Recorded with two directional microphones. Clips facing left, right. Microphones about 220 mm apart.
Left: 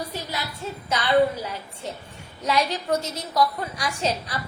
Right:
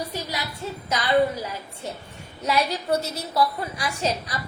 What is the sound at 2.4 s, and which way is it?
A woman's voice, 10° right (ahead or behind).